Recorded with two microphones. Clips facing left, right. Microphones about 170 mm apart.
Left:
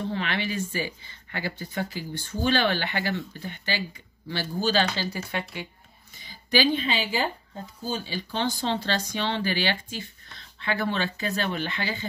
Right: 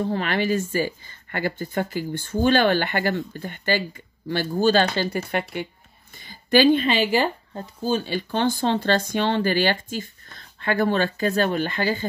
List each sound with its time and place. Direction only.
0.1 s speech: 45° right (ahead or behind)